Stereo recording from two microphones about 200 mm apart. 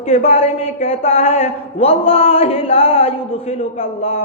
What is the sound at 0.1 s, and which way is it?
A man's voice, 30° left (ahead or behind).